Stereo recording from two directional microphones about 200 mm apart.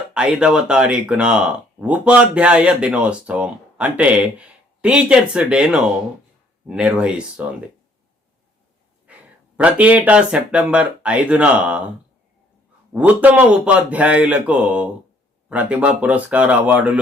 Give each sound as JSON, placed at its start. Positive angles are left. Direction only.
{"t": 0.1, "sound": "speech", "side_deg": -5}
{"t": 9.1, "sound": "a sound", "side_deg": -5}
{"t": 9.6, "sound": "speech", "side_deg": -5}
{"t": 12.9, "sound": "speech", "side_deg": -10}